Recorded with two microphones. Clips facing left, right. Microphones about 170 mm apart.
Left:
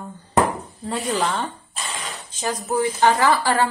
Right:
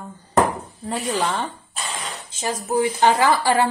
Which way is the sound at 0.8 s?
5° right (ahead or behind).